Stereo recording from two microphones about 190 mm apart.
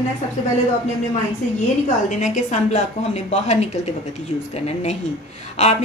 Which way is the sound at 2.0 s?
40° left (ahead or behind).